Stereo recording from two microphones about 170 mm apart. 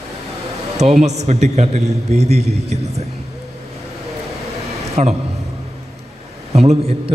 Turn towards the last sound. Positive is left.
turn(degrees=-40)  # may be behind; listen again after turning